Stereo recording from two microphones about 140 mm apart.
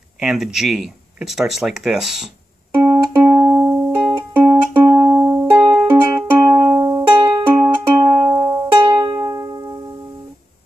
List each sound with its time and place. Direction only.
0.2 s speech: 5° right (ahead or behind)
2.8 s music: 15° right (ahead or behind)
3.7 s music: 15° right (ahead or behind)